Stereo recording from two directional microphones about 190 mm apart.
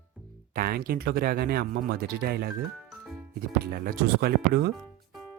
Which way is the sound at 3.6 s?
55° right (ahead or behind).